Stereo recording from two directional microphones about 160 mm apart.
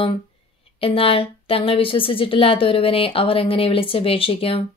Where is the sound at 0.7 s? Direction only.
35° left (ahead or behind).